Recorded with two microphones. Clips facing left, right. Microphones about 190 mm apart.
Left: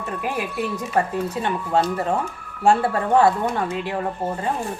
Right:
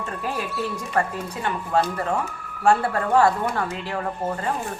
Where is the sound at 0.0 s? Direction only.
15° left (ahead or behind).